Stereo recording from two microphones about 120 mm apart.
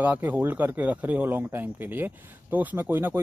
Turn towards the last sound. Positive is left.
turn(degrees=-15)  # may be behind; listen again after turning